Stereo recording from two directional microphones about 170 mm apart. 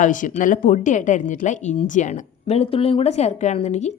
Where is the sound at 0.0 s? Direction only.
50° left (ahead or behind).